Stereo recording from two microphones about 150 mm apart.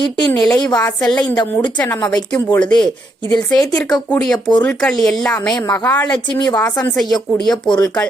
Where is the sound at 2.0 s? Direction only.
30° left (ahead or behind).